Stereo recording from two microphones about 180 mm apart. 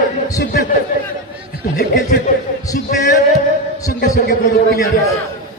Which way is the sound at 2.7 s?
45° left (ahead or behind).